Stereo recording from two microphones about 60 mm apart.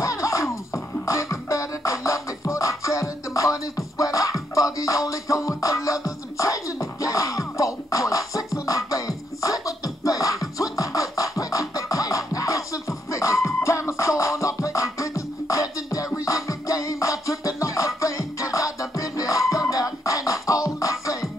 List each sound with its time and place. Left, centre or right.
0.0 s music: left